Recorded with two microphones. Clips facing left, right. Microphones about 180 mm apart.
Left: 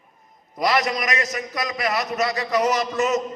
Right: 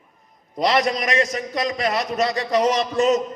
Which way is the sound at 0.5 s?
25° right (ahead or behind).